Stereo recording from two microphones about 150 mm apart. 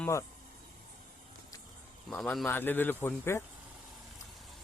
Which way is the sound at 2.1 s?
Centre (ahead or behind).